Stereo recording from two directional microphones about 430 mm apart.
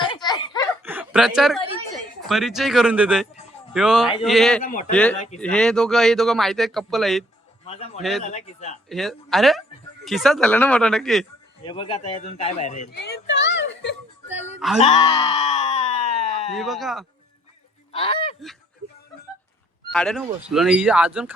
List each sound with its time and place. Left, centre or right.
0.0 s giggle: centre
0.9 s chuckle: centre
2.2 s speech: centre
4.6 s a man's voice: centre
4.9 s speech: centre
7.7 s a man's voice: centre
8.9 s speech: centre
11.6 s speech: centre
14.3 s music: centre
14.8 s a sound: centre
16.5 s speech: centre
17.9 s honk: centre
19.9 s speech: centre